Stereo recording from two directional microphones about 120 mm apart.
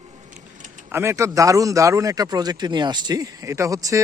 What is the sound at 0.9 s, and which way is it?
A man's voice, 20° right (ahead or behind).